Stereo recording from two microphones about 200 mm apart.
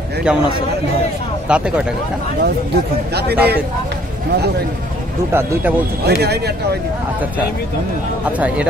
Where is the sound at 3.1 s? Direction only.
55° right (ahead or behind).